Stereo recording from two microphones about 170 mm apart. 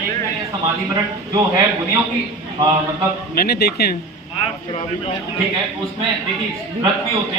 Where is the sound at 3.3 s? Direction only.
65° left (ahead or behind).